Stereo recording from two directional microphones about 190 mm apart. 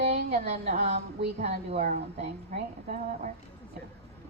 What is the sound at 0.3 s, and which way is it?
A woman's voice, 35° right (ahead or behind).